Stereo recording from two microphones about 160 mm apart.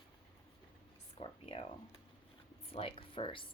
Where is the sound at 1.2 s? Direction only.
35° left (ahead or behind).